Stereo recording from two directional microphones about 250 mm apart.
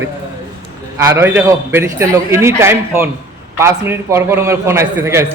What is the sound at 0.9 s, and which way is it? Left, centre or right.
A man's voice, centre.